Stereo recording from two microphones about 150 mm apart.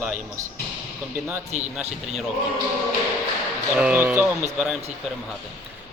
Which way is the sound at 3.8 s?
10° right (ahead or behind).